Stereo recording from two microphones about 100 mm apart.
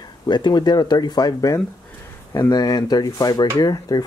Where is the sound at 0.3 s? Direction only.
45° left (ahead or behind).